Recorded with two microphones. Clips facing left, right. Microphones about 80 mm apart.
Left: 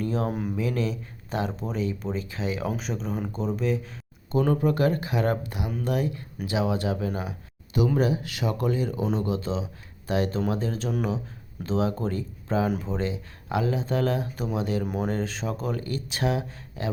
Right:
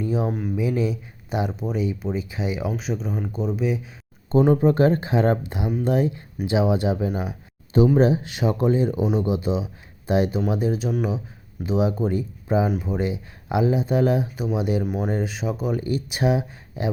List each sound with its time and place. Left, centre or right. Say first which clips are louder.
0.0 s speech: right 3 dB; centre
4.3 s speech: right 6 dB; right
7.9 s speech: right 6 dB; right
14.8 s speech: right 3 dB; centre